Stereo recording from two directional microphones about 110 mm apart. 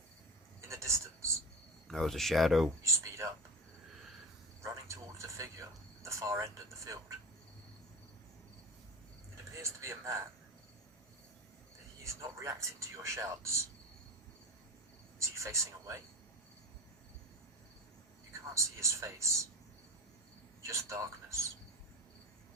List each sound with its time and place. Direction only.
0.7 s a sound: 25° right (ahead or behind)
1.9 s speech: 5° left (ahead or behind)
2.8 s speech: 30° right (ahead or behind)
4.6 s a sound: 25° right (ahead or behind)
9.6 s speech: 25° right (ahead or behind)
12.0 s speech: 25° right (ahead or behind)
15.2 s a sound: 25° right (ahead or behind)
18.5 s speech: 25° right (ahead or behind)
20.6 s a man's voice: 25° right (ahead or behind)